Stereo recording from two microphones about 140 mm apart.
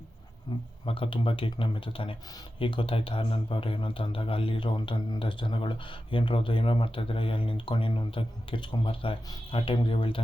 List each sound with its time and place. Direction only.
0.5 s speech: 30° left (ahead or behind)
0.9 s speech: 40° left (ahead or behind)